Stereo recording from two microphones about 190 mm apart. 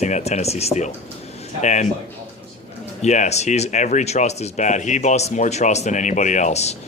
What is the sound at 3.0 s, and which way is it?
Speech, 35° left (ahead or behind).